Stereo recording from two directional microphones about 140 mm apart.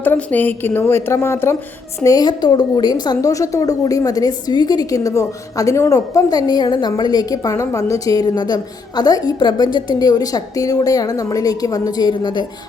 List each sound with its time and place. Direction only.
0.0 s a woman's voice: 10° left (ahead or behind)
2.0 s a woman's voice: 30° left (ahead or behind)